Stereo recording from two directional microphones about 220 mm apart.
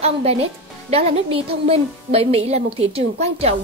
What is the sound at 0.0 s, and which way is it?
A woman's voice, 30° right (ahead or behind).